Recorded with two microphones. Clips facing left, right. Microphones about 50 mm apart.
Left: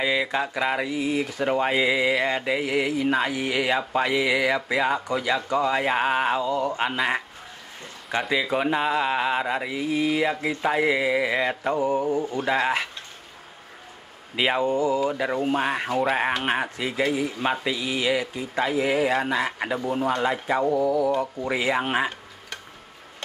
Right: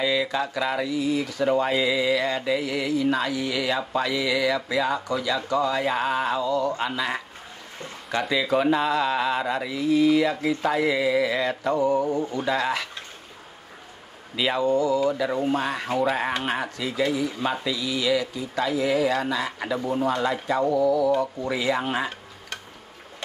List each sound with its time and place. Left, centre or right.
0.0 s speech: left
8.1 s speech: centre
12.4 s speech: left
14.3 s speech: left